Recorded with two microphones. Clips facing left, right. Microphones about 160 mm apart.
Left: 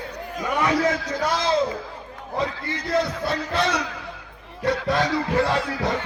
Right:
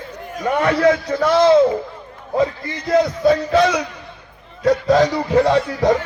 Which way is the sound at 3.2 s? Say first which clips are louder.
Right 10 dB; 90° right.